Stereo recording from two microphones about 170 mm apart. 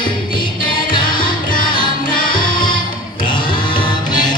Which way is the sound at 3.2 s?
30° left (ahead or behind).